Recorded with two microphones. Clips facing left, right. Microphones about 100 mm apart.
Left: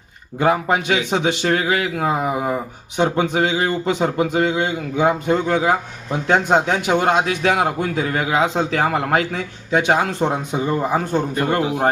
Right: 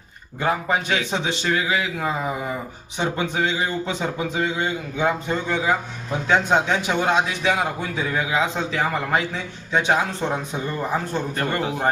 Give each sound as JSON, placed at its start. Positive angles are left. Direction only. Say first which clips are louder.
{"t": 0.3, "sound": "a man's voice", "louder": "left 5 dB", "side_deg": 85}